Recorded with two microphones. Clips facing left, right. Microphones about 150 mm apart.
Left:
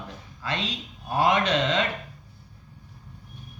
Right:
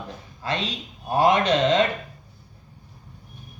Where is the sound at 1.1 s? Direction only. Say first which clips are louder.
Right 3 dB; 40° right (ahead or behind).